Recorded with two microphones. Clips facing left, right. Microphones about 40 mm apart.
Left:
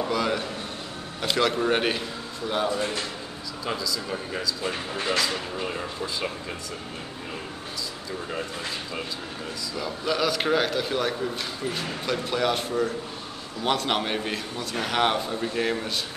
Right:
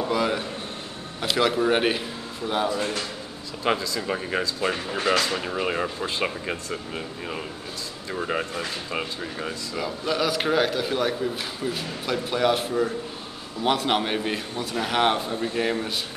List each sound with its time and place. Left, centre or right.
0.1 s a man's voice: centre
3.6 s speech: right
9.8 s a man's voice: centre